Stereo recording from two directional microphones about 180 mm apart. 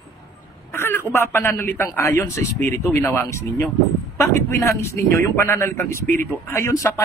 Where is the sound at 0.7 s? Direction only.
15° left (ahead or behind).